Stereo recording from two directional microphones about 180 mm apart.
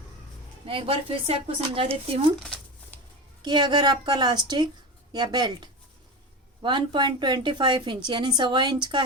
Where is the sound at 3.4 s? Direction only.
25° right (ahead or behind).